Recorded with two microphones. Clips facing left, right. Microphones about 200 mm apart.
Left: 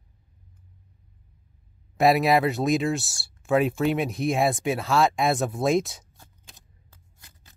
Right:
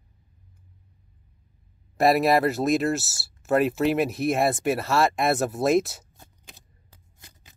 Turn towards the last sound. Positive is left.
turn(degrees=-15)  # may be behind; listen again after turning